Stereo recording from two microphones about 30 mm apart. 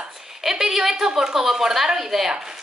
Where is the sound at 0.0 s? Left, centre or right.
Centre.